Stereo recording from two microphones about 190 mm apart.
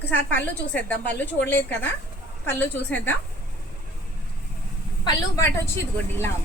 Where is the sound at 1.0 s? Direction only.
65° left (ahead or behind).